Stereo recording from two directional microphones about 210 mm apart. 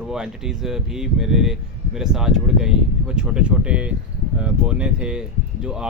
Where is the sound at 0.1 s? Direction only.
5° right (ahead or behind).